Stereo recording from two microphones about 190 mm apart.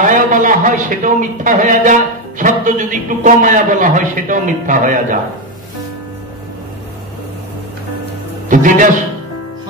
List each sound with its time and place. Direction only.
0.0 s a man's voice: 45° right (ahead or behind)
8.5 s a man's voice: 45° right (ahead or behind)